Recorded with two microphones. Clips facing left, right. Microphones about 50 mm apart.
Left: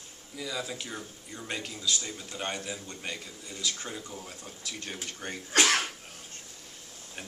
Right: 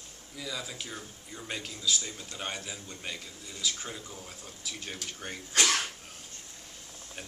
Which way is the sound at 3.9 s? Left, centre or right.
Centre.